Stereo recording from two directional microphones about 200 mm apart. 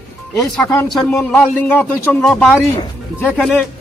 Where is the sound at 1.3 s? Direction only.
5° left (ahead or behind).